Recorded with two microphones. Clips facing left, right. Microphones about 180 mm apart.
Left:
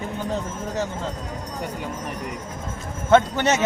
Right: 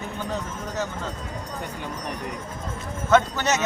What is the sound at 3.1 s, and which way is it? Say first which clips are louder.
Speech: left 3 dB; 25° left (ahead or behind).